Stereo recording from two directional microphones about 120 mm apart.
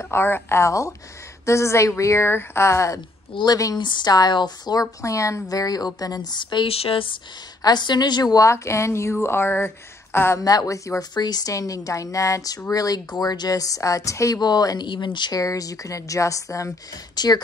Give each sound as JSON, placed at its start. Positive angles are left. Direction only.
{"t": 0.0, "sound": "speech", "side_deg": 20}
{"t": 7.6, "sound": "speech", "side_deg": 35}
{"t": 10.4, "sound": "speech", "side_deg": 30}